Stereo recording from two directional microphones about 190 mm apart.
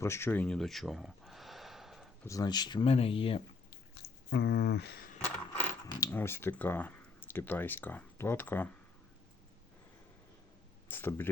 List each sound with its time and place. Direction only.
0.0 s a sound: 15° left (ahead or behind)
2.2 s speech: 20° left (ahead or behind)
3.7 s biting: 60° left (ahead or behind)
5.5 s speech: 10° left (ahead or behind)
10.8 s speech: 10° left (ahead or behind)